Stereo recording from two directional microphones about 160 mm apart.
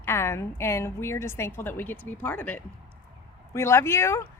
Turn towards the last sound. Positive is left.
turn(degrees=15)  # may be behind; listen again after turning